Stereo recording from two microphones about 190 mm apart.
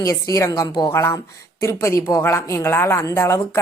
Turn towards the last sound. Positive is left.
turn(degrees=15)  # may be behind; listen again after turning